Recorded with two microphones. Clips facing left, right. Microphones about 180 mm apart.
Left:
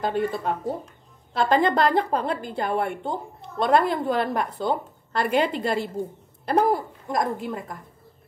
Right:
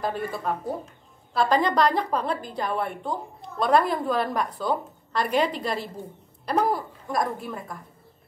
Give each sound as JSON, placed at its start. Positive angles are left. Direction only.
{"t": 0.0, "sound": "a woman's voice", "side_deg": 20}